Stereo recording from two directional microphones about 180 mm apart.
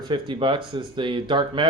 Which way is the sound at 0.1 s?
25° right (ahead or behind).